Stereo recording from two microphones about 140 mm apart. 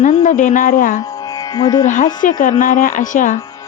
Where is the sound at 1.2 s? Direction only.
25° left (ahead or behind).